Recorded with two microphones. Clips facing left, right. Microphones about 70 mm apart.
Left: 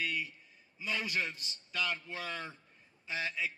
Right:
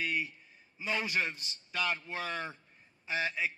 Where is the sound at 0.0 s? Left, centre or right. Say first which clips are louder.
Right 2 dB; right.